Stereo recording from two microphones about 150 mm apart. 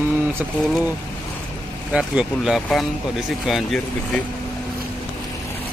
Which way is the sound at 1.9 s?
5° right (ahead or behind).